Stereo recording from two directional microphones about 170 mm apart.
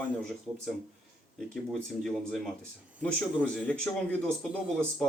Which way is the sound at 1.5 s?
Centre (ahead or behind).